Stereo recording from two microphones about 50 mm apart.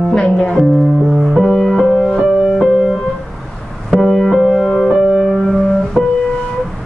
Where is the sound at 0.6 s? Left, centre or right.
Centre.